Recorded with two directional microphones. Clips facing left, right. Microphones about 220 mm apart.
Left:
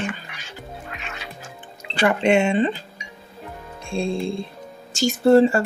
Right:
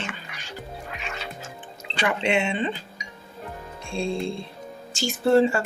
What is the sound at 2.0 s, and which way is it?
Speech, 45° left (ahead or behind).